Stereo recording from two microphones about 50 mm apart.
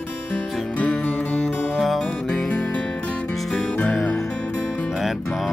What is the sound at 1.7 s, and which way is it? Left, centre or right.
Music, centre.